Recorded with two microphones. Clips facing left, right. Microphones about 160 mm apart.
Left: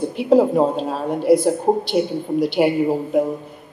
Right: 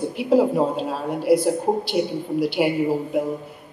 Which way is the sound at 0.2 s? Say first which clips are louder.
Left 3 dB; 5° right (ahead or behind).